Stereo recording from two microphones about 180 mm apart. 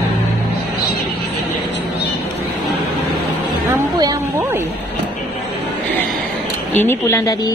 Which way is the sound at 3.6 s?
20° right (ahead or behind).